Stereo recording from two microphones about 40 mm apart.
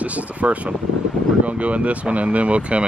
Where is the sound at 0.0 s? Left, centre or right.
Right.